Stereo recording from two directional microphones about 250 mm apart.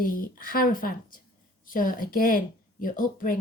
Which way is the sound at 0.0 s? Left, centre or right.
Left.